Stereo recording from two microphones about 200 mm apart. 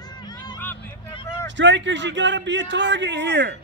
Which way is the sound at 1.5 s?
65° right (ahead or behind).